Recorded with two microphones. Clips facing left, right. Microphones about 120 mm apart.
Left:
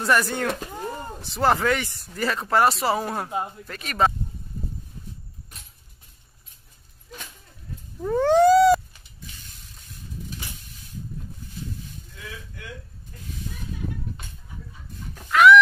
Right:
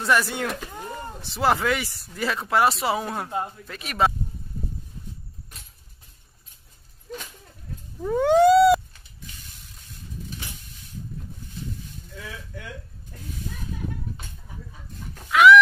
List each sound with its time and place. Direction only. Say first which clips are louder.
0.0 s speech: left 1 dB; centre (ahead or behind)
3.3 s speech: even; 15° left (ahead or behind)
3.6 s speech: left 1 dB; 5° right (ahead or behind)
8.0 s a sound: even; centre (ahead or behind)
15.2 s chicken: even; centre (ahead or behind)